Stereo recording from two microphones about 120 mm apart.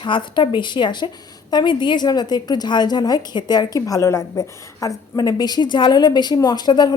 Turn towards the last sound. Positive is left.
turn(degrees=35)  # may be behind; listen again after turning